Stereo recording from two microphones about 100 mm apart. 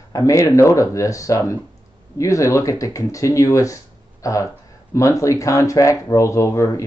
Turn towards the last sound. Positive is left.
turn(degrees=30)  # may be behind; listen again after turning